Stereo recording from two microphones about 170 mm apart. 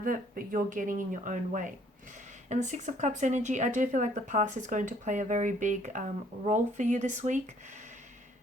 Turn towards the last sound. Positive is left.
turn(degrees=-45)  # may be behind; listen again after turning